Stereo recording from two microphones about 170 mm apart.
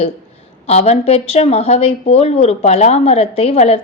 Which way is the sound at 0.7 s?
35° left (ahead or behind).